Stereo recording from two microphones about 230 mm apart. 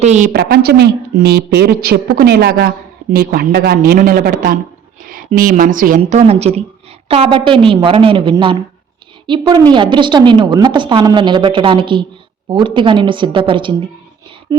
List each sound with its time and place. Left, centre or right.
0.0 s a woman's voice: right
0.3 s a woman's voice: right